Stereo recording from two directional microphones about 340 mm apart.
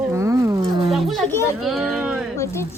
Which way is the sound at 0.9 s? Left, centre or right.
Centre.